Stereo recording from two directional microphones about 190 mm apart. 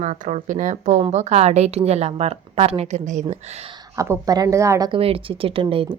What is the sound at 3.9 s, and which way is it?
A woman's voice, 15° right (ahead or behind).